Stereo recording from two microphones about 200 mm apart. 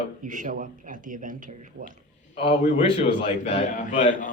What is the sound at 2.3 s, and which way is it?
A man's voice, 30° left (ahead or behind).